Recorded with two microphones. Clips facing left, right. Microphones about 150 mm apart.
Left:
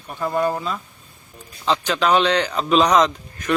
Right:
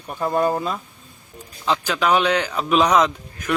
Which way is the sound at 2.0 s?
5° right (ahead or behind).